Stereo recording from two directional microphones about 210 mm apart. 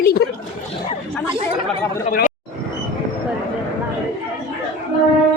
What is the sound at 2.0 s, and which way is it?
Speech, 40° left (ahead or behind).